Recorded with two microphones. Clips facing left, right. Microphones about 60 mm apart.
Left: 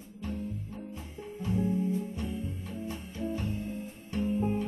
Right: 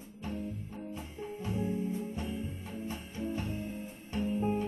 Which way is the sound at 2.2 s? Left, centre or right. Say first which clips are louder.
Left 2 dB; right.